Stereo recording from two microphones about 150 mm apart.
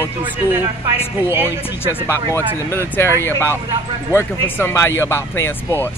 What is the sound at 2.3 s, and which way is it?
A man's voice, 15° left (ahead or behind).